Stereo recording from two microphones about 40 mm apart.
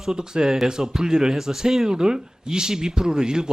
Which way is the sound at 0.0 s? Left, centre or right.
Centre.